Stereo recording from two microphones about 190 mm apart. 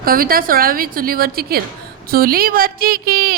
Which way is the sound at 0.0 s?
50° right (ahead or behind).